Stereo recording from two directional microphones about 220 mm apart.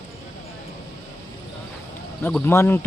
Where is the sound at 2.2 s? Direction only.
10° left (ahead or behind).